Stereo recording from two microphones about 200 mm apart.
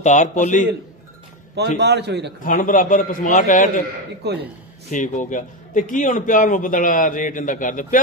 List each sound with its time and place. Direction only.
0.0 s a man's voice: 40° left (ahead or behind)
1.8 s a man's voice: 55° right (ahead or behind)
2.4 s a man's voice: 40° left (ahead or behind)
4.2 s a man's voice: 55° right (ahead or behind)
4.9 s a man's voice: 40° left (ahead or behind)